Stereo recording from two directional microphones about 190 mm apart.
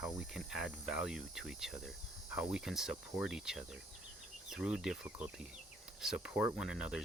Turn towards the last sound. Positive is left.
turn(degrees=-5)  # may be behind; listen again after turning